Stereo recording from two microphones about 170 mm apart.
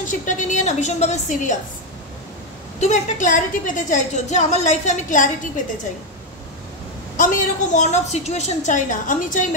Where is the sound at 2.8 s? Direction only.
45° left (ahead or behind).